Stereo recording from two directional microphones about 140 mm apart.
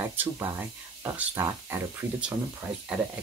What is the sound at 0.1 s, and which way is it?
Speech, 15° right (ahead or behind).